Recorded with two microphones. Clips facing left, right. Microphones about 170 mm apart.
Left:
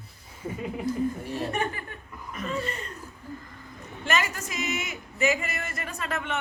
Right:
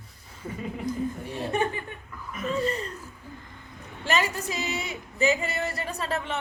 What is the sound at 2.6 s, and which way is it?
Speech, 35° right (ahead or behind).